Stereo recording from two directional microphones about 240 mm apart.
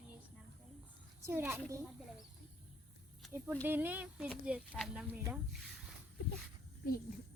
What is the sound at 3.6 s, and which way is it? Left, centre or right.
Speech, centre.